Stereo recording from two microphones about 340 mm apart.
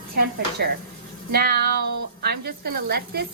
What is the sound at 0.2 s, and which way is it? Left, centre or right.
A woman's voice, right.